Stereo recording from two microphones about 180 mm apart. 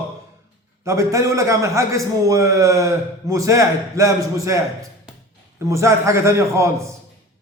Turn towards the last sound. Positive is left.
turn(degrees=-15)  # may be behind; listen again after turning